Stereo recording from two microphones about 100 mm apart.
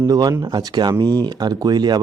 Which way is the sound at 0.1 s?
40° right (ahead or behind).